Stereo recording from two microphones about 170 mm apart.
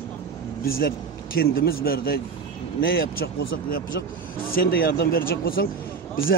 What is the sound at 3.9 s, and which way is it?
Speech, 80° left.